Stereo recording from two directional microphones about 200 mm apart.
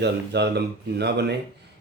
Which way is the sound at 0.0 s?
55° right (ahead or behind).